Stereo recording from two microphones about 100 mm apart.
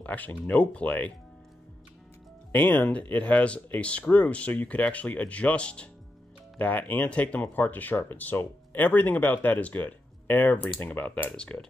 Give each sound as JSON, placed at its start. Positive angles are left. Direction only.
{"t": 0.0, "sound": "speech", "side_deg": 15}
{"t": 2.7, "sound": "speech", "side_deg": 15}